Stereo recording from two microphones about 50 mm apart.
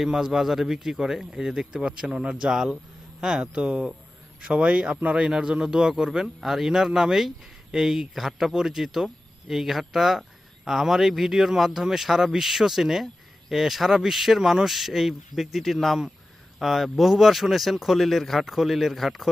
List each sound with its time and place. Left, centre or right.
0.0 s a man's voice: centre